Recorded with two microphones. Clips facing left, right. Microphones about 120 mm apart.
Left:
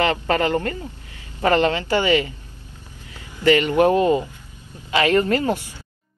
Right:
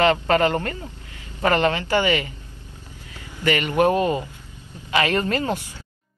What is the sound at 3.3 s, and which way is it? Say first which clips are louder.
Speech: left 4 dB; 20° left (ahead or behind).